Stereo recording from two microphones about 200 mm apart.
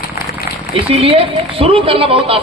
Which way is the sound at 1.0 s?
25° right (ahead or behind).